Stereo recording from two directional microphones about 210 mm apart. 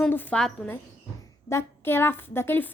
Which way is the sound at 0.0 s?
10° left (ahead or behind).